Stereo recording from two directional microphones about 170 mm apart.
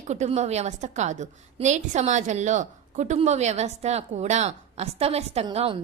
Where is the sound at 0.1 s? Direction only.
40° right (ahead or behind).